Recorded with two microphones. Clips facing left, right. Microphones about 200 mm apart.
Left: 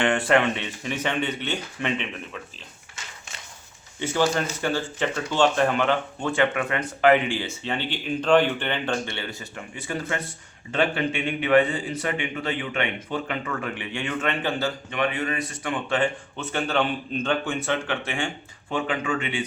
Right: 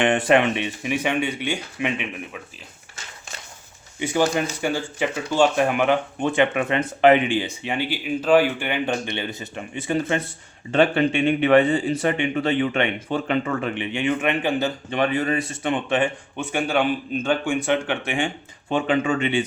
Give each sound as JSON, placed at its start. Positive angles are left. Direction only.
{"t": 0.0, "sound": "speech", "side_deg": -20}
{"t": 4.0, "sound": "speech", "side_deg": -15}
{"t": 14.8, "sound": "speech", "side_deg": -35}